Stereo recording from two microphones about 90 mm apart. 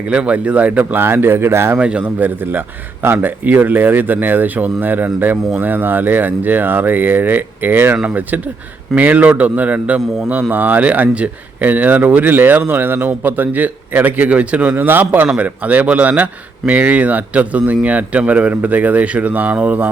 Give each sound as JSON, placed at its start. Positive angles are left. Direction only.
{"t": 0.1, "sound": "speech", "side_deg": -15}
{"t": 1.8, "sound": "speech", "side_deg": -10}